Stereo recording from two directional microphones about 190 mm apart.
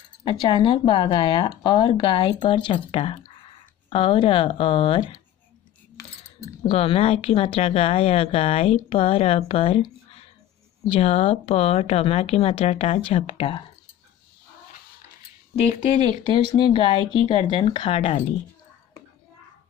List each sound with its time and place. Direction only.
0.2 s speech: 25° left (ahead or behind)
6.6 s speech: 30° left (ahead or behind)
10.9 s speech: 30° left (ahead or behind)
15.5 s speech: 35° left (ahead or behind)
16.4 s speech: 25° left (ahead or behind)